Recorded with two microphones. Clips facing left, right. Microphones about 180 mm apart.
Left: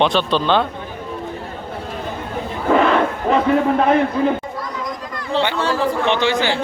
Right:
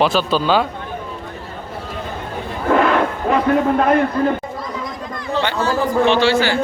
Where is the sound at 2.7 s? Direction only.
Centre (ahead or behind).